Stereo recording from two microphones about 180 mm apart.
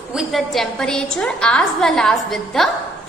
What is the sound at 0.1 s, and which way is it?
A woman's voice, centre (ahead or behind).